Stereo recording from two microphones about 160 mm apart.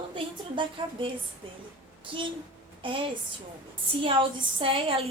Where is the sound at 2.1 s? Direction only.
30° right (ahead or behind).